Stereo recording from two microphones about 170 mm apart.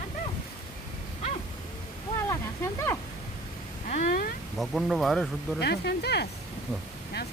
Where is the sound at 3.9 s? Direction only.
50° left (ahead or behind).